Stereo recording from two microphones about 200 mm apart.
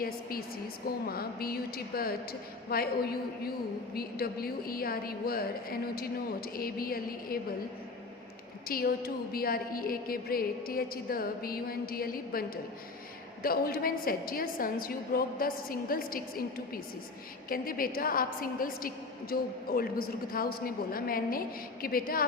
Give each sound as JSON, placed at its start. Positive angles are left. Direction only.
{"t": 0.0, "sound": "a woman's voice", "side_deg": 45}
{"t": 8.6, "sound": "a woman's voice", "side_deg": 50}